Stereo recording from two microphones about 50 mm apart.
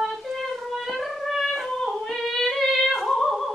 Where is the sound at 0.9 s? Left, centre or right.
Centre.